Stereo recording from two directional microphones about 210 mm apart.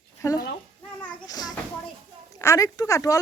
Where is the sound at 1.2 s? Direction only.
20° left (ahead or behind).